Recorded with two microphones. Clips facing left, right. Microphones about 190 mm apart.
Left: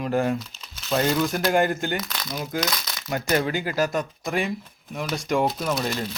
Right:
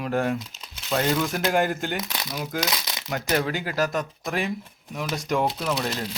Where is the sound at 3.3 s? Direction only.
Centre (ahead or behind).